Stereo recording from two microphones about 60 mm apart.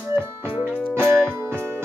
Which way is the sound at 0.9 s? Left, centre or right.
Right.